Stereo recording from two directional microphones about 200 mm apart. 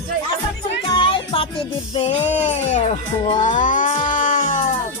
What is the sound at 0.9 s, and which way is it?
Music, 25° left (ahead or behind).